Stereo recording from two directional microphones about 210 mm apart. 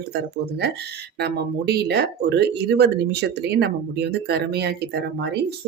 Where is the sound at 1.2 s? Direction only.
50° right (ahead or behind).